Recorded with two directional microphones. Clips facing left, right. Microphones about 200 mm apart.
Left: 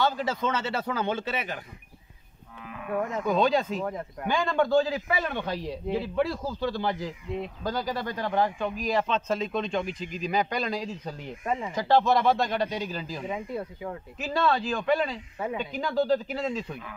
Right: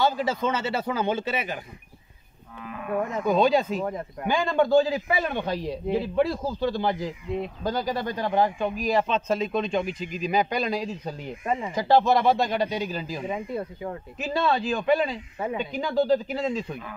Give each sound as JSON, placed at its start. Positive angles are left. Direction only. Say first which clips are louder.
{"t": 0.0, "sound": "a man's voice", "louder": "right 3 dB", "side_deg": -10}
{"t": 2.6, "sound": "cattle", "louder": "right 4 dB", "side_deg": -45}
{"t": 3.3, "sound": "a man's voice", "louder": "right 3 dB", "side_deg": -10}
{"t": 16.1, "sound": "speech", "louder": "right 3 dB", "side_deg": 0}